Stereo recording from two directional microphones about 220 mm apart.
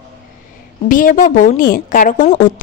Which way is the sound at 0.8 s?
40° left (ahead or behind).